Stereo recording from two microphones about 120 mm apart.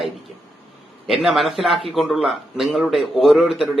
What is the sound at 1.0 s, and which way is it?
A man's voice, centre (ahead or behind).